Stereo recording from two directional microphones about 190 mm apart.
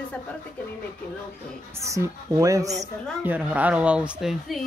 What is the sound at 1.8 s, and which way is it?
Speech, 15° right (ahead or behind).